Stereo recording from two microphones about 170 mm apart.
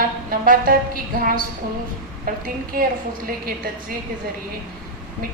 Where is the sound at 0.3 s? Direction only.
55° right (ahead or behind).